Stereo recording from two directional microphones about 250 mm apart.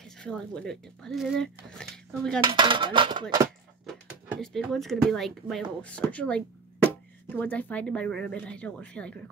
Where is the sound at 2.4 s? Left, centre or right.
Centre.